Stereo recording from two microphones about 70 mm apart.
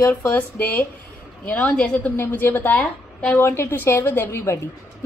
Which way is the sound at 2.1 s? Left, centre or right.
Left.